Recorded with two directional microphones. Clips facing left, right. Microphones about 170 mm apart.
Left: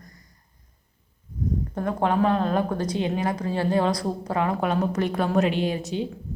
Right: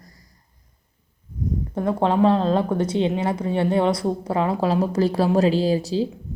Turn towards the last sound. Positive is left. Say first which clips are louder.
# right 5 dB
turn(degrees=-30)  # may be behind; listen again after turning